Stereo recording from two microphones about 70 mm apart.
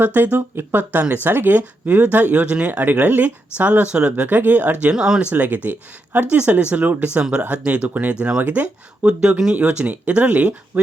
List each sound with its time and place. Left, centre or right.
0.0 s speech: right
4.9 s speech: centre
5.3 s speech: right
9.0 s speech: centre